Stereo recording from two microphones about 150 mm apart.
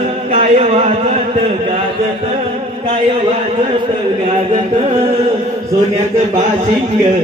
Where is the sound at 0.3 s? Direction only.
45° right (ahead or behind).